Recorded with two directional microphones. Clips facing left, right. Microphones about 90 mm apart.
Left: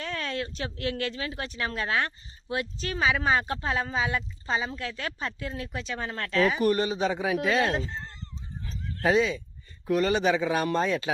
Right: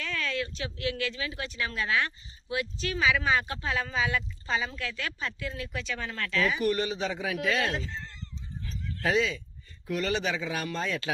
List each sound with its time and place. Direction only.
0.0 s speech: 40° left (ahead or behind)
7.7 s speech: 40° left (ahead or behind)
8.6 s dog: 30° left (ahead or behind)
9.1 s speech: 20° left (ahead or behind)
9.8 s speech: 35° left (ahead or behind)
10.8 s speech: 25° left (ahead or behind)